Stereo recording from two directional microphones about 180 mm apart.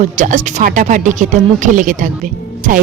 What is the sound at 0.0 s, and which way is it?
A woman's voice, 45° right (ahead or behind).